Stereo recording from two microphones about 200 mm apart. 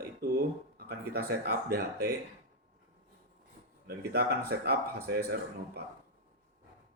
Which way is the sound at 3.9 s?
50° right (ahead or behind).